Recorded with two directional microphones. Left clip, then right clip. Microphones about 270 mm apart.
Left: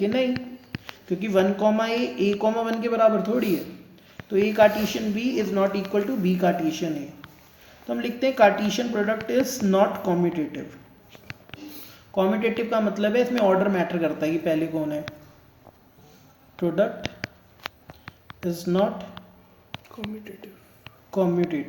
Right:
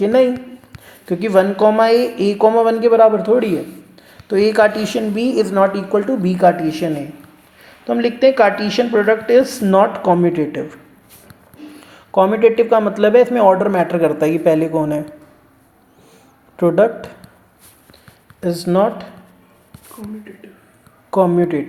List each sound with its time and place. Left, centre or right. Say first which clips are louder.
0.0 s speech: right 11 dB; centre
4.5 s speech: right 5 dB; centre
12.1 s speech: right 12 dB; centre
16.6 s speech: right 10 dB; right
18.6 s speech: right 8 dB; centre
21.1 s speech: right 10 dB; centre